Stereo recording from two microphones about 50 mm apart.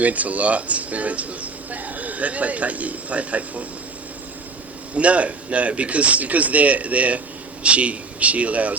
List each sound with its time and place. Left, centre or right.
0.0 s speech: right
4.9 s a man's voice: right